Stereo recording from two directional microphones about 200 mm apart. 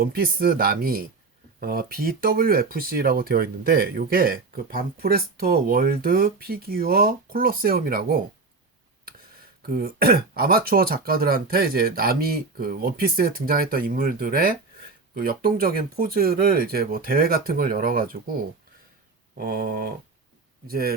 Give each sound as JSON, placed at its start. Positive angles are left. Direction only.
{"t": 0.0, "sound": "speech", "side_deg": -45}
{"t": 9.6, "sound": "speech", "side_deg": -50}